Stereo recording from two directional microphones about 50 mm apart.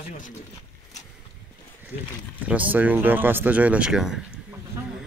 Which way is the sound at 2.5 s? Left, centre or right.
Right.